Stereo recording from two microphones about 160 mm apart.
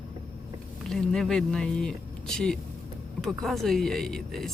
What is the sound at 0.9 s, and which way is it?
Speech, centre (ahead or behind).